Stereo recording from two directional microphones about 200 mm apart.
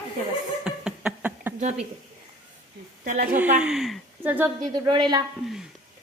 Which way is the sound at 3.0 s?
45° right (ahead or behind).